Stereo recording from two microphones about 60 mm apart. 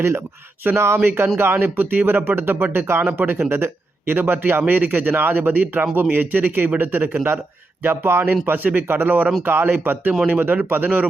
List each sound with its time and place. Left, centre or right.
0.7 s speech: right
1.0 s speech: right